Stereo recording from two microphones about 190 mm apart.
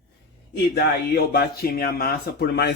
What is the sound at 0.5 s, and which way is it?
Speech, 60° left (ahead or behind).